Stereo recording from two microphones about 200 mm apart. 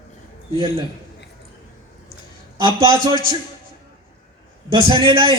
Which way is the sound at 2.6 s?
20° right (ahead or behind).